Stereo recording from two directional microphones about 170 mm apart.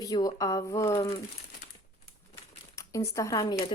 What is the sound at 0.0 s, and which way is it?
Speech, 20° left (ahead or behind).